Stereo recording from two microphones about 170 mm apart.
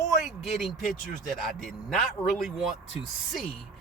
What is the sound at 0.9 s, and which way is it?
Speech, 50° left (ahead or behind).